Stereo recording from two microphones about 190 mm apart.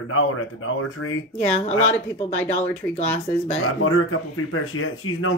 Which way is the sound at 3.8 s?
90° left.